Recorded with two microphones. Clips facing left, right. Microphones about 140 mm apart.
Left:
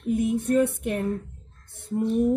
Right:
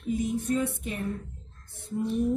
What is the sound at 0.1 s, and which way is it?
Speech, 60° left (ahead or behind).